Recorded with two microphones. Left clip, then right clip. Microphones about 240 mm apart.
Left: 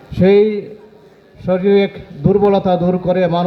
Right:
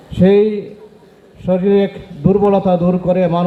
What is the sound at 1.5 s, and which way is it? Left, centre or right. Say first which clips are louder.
Speech: even; left.